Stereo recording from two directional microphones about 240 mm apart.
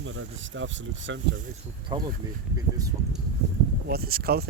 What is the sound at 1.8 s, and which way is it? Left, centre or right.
Speech, centre.